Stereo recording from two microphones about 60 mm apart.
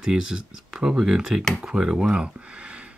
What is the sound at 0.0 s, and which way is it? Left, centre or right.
Speech, centre.